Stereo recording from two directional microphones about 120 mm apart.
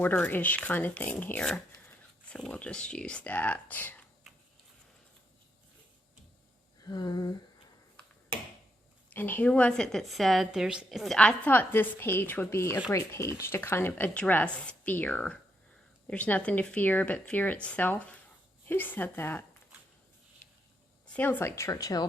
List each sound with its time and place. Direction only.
0.0 s a woman's voice: 15° left (ahead or behind)
6.8 s a sound: 35° left (ahead or behind)
9.0 s a woman's voice: 15° left (ahead or behind); by 11.2 s centre (ahead or behind)
11.2 s a woman's voice: 10° left (ahead or behind)
21.1 s speech: 15° left (ahead or behind); by 22.0 s 30° left (ahead or behind)